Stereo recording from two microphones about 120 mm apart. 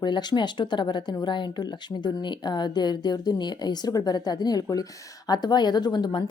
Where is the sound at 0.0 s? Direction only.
40° left (ahead or behind).